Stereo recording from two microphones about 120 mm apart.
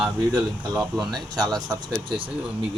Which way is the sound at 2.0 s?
40° right (ahead or behind).